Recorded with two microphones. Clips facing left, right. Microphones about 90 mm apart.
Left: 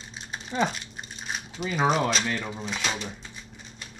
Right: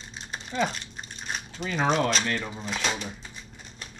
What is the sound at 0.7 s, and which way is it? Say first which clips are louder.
Speech: left 1 dB; 5° left (ahead or behind).